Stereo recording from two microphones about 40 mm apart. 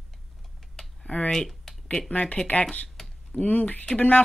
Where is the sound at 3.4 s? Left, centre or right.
Left.